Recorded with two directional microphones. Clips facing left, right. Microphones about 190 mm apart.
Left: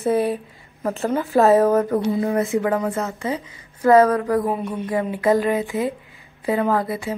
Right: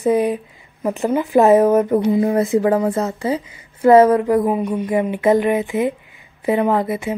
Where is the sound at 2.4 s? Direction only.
35° right (ahead or behind).